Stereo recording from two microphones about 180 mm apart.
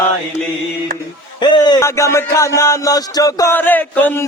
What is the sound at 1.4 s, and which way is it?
Speech, 25° left (ahead or behind).